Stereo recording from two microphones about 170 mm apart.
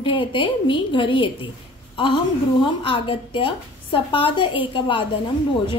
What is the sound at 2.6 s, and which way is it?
A woman's voice, 30° left (ahead or behind).